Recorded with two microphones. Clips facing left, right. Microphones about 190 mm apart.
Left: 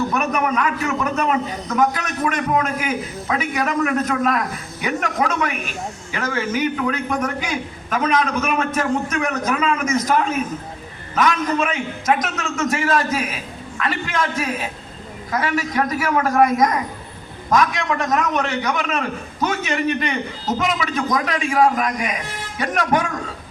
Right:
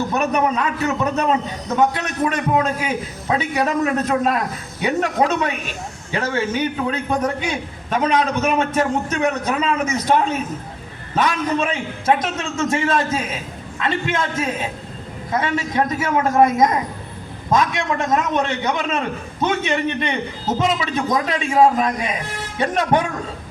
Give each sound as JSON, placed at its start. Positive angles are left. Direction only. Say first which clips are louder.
{"t": 0.1, "sound": "a man's voice", "louder": "right 2 dB", "side_deg": -30}